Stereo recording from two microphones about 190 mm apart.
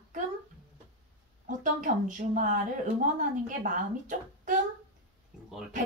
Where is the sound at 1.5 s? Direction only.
45° right (ahead or behind).